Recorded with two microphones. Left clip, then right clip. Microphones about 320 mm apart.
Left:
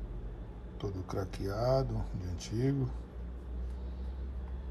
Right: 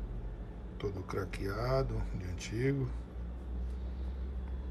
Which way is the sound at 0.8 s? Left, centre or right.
Centre.